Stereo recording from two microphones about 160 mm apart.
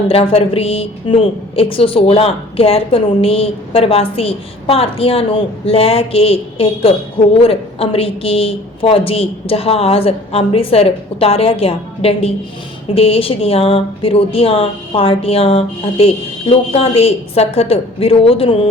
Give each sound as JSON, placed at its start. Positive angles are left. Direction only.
{"t": 0.1, "sound": "a woman's voice", "side_deg": 35}